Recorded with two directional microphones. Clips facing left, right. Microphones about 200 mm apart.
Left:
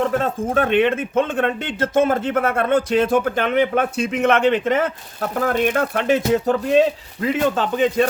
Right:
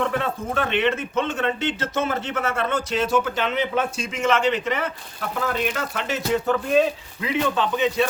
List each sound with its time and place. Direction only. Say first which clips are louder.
0.0 s speech: left 4 dB; 45° left (ahead or behind)